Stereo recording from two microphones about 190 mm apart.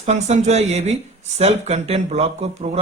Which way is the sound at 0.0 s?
35° right (ahead or behind).